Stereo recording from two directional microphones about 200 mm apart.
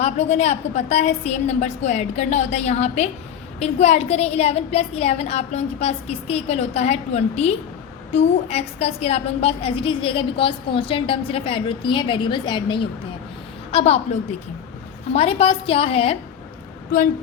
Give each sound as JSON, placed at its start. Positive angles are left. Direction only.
{"t": 0.0, "sound": "a woman's voice", "side_deg": 35}